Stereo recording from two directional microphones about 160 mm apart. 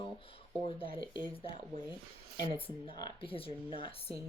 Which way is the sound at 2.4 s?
35° left (ahead or behind).